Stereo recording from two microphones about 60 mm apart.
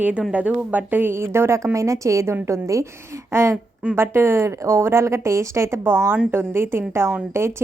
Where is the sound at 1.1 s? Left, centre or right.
Right.